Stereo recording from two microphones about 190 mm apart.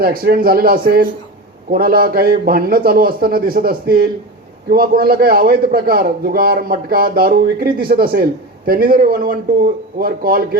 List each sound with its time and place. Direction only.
0.0 s a man's voice: 50° right (ahead or behind)